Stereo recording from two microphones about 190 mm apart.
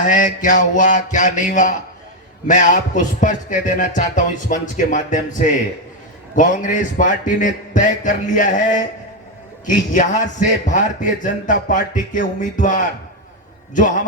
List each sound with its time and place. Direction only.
0.0 s a man's voice: 45° left (ahead or behind)
2.5 s music: 40° left (ahead or behind)
6.3 s a man's voice: 40° left (ahead or behind)